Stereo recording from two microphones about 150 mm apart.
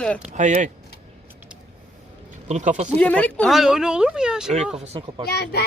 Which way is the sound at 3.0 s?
10° left (ahead or behind).